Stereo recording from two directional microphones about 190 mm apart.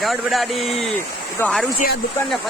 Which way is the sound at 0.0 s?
Centre (ahead or behind).